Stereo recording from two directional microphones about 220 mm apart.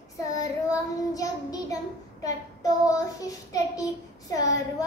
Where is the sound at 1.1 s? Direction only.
15° left (ahead or behind).